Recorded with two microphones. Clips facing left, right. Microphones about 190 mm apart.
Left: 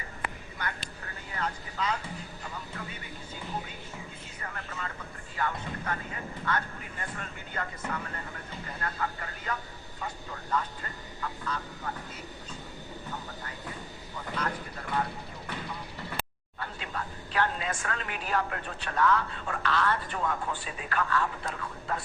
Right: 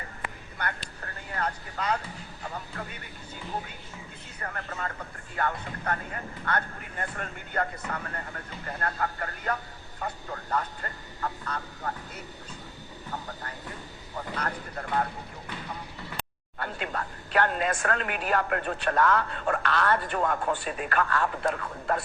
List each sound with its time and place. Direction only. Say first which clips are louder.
0.6 s speech: right 3 dB; 60° right (ahead or behind)
4.4 s speech: right 4 dB; 45° right (ahead or behind)
14.2 s speech: right 1 dB; 45° right (ahead or behind)
16.6 s speech: right 4 dB; 60° right (ahead or behind)